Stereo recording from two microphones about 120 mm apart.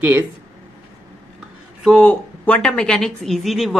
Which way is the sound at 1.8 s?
5° left (ahead or behind).